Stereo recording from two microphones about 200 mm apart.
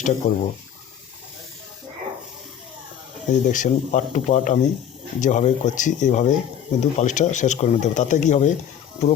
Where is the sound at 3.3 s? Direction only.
40° left (ahead or behind).